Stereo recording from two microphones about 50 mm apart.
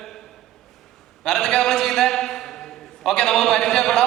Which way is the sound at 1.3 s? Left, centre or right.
Centre.